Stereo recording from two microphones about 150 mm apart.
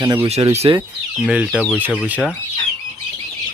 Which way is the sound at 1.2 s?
5° right (ahead or behind).